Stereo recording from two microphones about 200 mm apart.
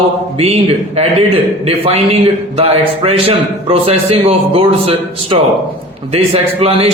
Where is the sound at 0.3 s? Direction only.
30° right (ahead or behind).